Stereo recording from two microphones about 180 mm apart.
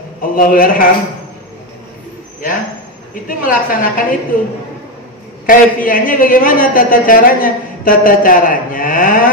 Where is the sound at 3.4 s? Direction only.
50° left (ahead or behind).